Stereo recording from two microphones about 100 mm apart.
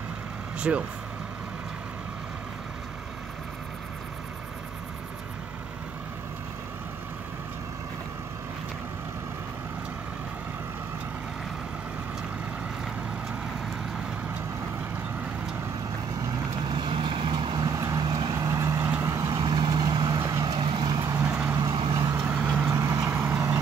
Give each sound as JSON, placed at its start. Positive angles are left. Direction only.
{"t": 0.6, "sound": "speech", "side_deg": -10}
{"t": 16.3, "sound": "vehicle", "side_deg": -50}
{"t": 19.3, "sound": "vehicle", "side_deg": -45}
{"t": 20.5, "sound": "vehicle", "side_deg": -50}
{"t": 21.3, "sound": "vehicle", "side_deg": -15}
{"t": 21.9, "sound": "vehicle", "side_deg": -35}
{"t": 22.2, "sound": "vehicle", "side_deg": -15}
{"t": 22.7, "sound": "vehicle", "side_deg": -35}